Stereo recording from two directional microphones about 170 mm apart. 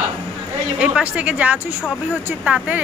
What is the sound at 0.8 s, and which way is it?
Speech, 5° right (ahead or behind).